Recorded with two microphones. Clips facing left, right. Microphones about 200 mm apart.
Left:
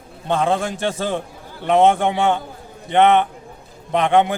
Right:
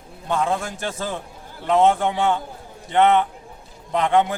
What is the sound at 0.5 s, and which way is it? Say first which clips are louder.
Speech: left 5 dB; 90° left.